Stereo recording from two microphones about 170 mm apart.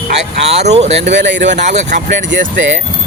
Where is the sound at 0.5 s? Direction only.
40° right (ahead or behind).